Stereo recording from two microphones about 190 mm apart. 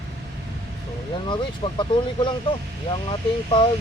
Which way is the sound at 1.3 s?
25° left (ahead or behind).